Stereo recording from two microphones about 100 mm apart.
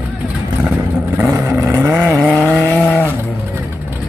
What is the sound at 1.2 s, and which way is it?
Vehicle, 25° right (ahead or behind).